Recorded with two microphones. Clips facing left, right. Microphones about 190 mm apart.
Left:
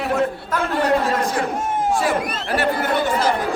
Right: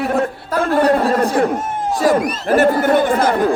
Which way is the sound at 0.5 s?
35° right (ahead or behind).